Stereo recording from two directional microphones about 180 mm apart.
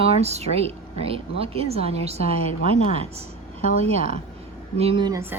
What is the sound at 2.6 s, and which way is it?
Speech, 45° left (ahead or behind).